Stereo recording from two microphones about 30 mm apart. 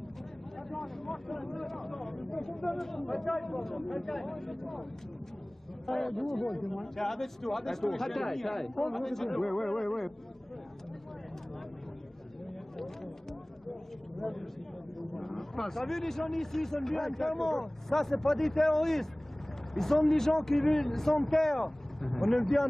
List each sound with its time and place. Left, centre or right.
0.7 s speech: centre
5.9 s speech: centre
12.7 s a sound: centre
14.1 s speech: centre